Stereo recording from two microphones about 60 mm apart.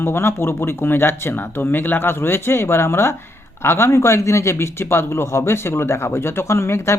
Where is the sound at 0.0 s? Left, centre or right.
Left.